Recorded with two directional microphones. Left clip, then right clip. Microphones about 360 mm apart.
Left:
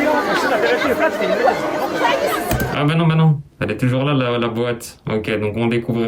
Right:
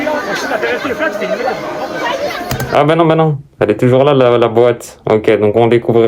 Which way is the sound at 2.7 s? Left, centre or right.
Centre.